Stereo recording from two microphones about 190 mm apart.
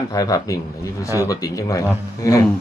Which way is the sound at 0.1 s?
20° left (ahead or behind).